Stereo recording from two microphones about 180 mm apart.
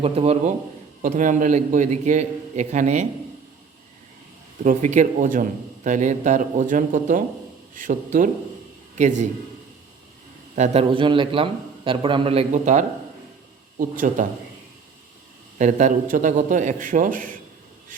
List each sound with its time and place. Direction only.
0.0 s a man's voice: 35° right (ahead or behind)
1.0 s a man's voice: 45° right (ahead or behind)
4.6 s a man's voice: 45° right (ahead or behind)
10.5 s a man's voice: 35° right (ahead or behind)
13.7 s a man's voice: 45° right (ahead or behind)
15.5 s a man's voice: 45° right (ahead or behind)